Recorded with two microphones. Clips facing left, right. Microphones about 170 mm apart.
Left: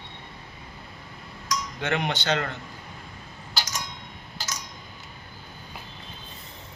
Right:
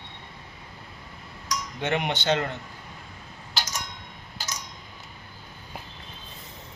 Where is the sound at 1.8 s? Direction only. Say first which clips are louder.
Right 2 dB; 25° right (ahead or behind).